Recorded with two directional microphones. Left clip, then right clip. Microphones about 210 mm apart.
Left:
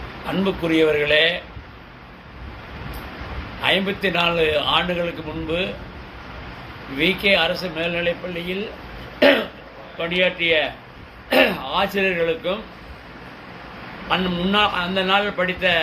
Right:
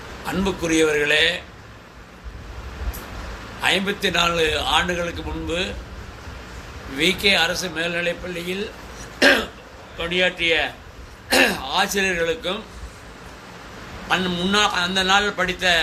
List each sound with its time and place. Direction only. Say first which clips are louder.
0.3 s a man's voice: left 1 dB; 15° right (ahead or behind)
3.6 s a man's voice: even; 15° right (ahead or behind)
7.0 s speech: even; 20° right (ahead or behind)
9.1 s throat clearing: left 1 dB; 15° right (ahead or behind)
10.0 s a man's voice: left 1 dB; 15° right (ahead or behind)
14.1 s a man's voice: even; 20° right (ahead or behind)